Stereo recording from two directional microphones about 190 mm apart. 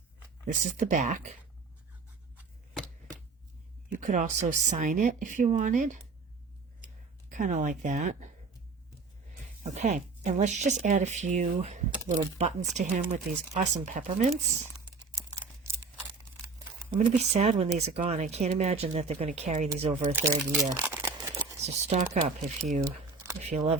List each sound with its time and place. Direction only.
0.4 s speech: 40° right (ahead or behind)
3.9 s speech: 40° right (ahead or behind)
7.3 s speech: 40° right (ahead or behind)
9.6 s speech: 40° right (ahead or behind)
14.8 s crumpling: 20° right (ahead or behind)
17.0 s speech: 35° right (ahead or behind)
20.1 s speech: 10° right (ahead or behind)
20.4 s speech: centre (ahead or behind)
20.8 s crumpling: 10° right (ahead or behind)
21.2 s a sound: 15° right (ahead or behind)
21.6 s speech: 35° right (ahead or behind)
22.8 s typing: 15° right (ahead or behind)
23.4 s speech: 35° right (ahead or behind)